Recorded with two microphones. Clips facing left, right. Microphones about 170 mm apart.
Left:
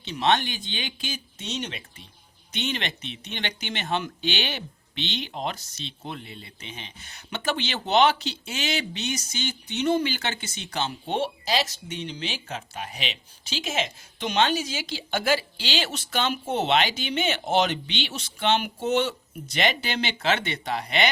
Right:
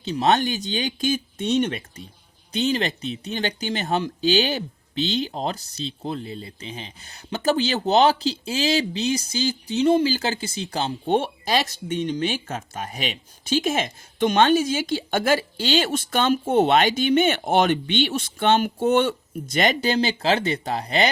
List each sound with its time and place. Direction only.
0.0 s speech: 40° right (ahead or behind)
2.5 s speech: 35° right (ahead or behind)
11.1 s speech: 50° right (ahead or behind); by 21.1 s 35° right (ahead or behind)